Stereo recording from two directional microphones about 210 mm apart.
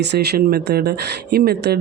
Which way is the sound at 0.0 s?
50° right (ahead or behind).